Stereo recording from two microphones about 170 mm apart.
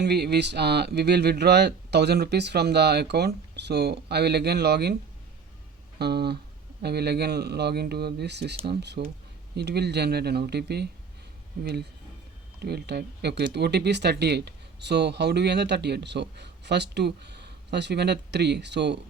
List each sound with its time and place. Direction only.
0.0 s speech: 75° right (ahead or behind)
6.0 s speech: 70° right (ahead or behind)